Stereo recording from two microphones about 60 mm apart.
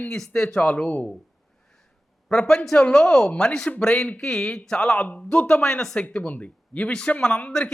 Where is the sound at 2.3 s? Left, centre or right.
Centre.